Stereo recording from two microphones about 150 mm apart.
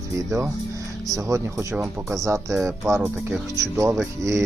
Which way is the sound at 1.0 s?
20° right (ahead or behind).